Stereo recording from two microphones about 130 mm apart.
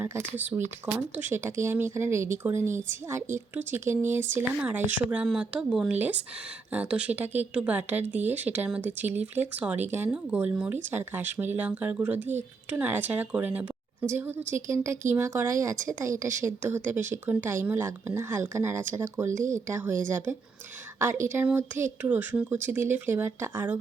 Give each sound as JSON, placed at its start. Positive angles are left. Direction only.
{"t": 0.9, "sound": "speech", "side_deg": -15}